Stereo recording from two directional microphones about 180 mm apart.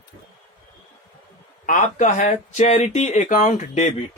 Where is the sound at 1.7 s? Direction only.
45° left (ahead or behind).